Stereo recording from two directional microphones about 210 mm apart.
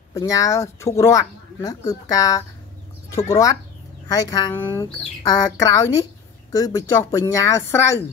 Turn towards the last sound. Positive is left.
turn(degrees=10)  # may be behind; listen again after turning